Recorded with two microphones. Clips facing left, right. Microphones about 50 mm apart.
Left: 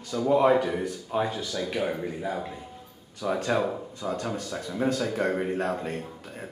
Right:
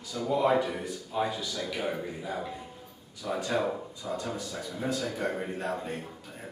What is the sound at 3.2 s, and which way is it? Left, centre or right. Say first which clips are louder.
A man's voice: left 4 dB; left.